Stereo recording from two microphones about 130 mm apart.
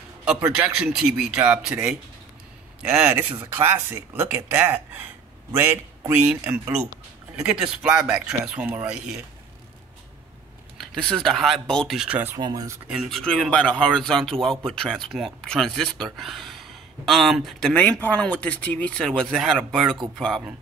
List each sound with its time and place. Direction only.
0.6 s speech: 5° right (ahead or behind)
10.8 s speech: 5° left (ahead or behind)
12.4 s speech: 35° right (ahead or behind)
12.8 s speech: 10° right (ahead or behind)
13.2 s speech: 5° left (ahead or behind)